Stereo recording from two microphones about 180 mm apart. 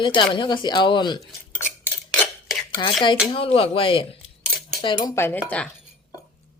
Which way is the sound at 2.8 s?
20° left (ahead or behind).